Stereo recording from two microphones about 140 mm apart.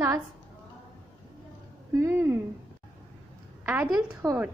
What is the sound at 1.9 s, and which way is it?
Speech, 20° right (ahead or behind).